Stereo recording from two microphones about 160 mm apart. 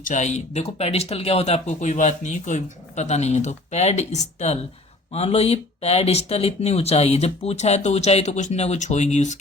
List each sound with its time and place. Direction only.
0.0 s speech: 50° left (ahead or behind)